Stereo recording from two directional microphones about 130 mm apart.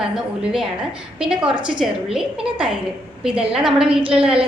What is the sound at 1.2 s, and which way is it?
A woman's voice, 5° right (ahead or behind).